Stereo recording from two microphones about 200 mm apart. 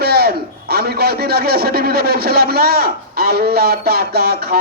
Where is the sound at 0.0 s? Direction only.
50° right (ahead or behind).